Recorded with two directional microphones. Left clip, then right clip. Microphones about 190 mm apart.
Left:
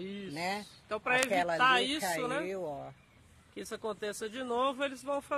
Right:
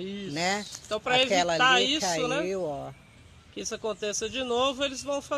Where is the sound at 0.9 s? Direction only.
30° left (ahead or behind).